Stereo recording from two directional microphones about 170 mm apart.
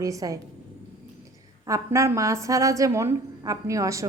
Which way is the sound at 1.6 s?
20° right (ahead or behind).